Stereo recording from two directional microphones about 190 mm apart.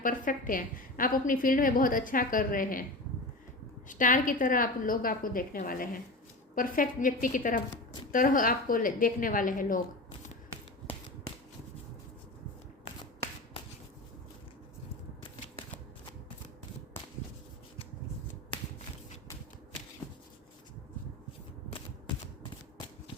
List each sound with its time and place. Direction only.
0.0 s a woman's voice: 45° left (ahead or behind)
3.8 s a woman's voice: 45° left (ahead or behind)